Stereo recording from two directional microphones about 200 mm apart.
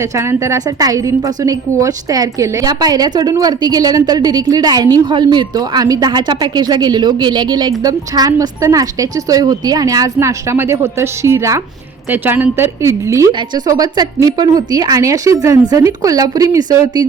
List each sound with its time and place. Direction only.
0.2 s a woman's voice: 15° right (ahead or behind)